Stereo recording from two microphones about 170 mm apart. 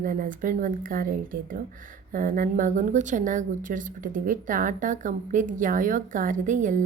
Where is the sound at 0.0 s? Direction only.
55° right (ahead or behind).